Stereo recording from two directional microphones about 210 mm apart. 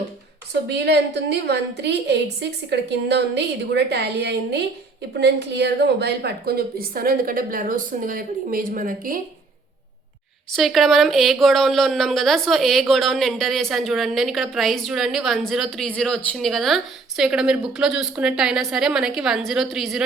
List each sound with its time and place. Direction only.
0.7 s a woman's voice: 55° right (ahead or behind)
10.5 s a woman's voice: centre (ahead or behind)